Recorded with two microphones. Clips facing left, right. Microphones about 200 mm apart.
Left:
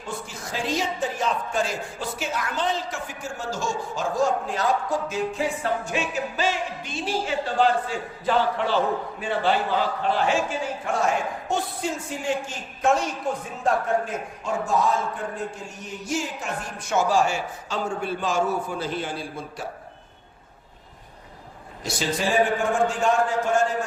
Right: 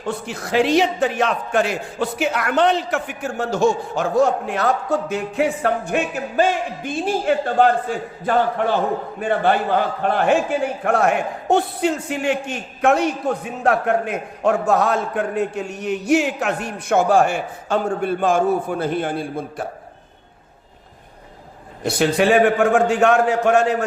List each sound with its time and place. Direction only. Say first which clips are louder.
0.0 s a man's voice: right 7 dB; 65° right (ahead or behind)
21.8 s a man's voice: right 9 dB; 60° right (ahead or behind)